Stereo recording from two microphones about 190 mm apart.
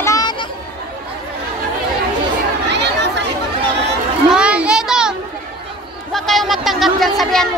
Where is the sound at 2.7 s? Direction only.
65° right (ahead or behind).